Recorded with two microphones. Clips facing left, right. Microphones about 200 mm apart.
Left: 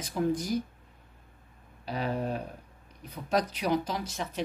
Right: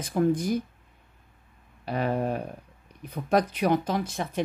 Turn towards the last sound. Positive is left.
turn(degrees=-55)  # may be behind; listen again after turning